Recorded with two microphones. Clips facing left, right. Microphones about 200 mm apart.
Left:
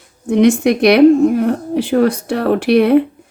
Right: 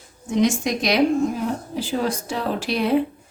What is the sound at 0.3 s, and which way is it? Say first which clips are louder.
A woman's voice: left 9 dB; 60° left (ahead or behind).